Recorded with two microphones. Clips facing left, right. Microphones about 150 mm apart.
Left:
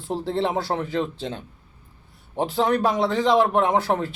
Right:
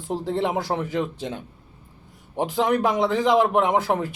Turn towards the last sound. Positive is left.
turn(degrees=-15)  # may be behind; listen again after turning